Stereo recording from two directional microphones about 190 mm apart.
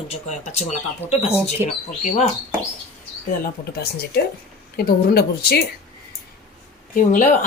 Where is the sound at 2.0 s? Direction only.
40° left (ahead or behind).